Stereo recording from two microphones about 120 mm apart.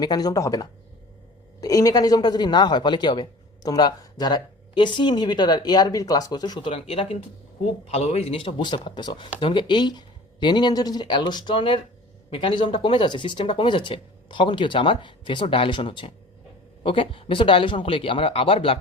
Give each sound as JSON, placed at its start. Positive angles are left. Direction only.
{"t": 0.0, "sound": "a man's voice", "side_deg": 35}
{"t": 6.7, "sound": "a man's voice", "side_deg": 50}